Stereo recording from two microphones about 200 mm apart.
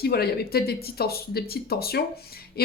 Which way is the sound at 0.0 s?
50° left (ahead or behind).